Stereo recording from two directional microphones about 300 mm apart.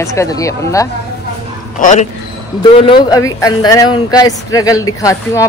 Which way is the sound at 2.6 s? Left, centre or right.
Centre.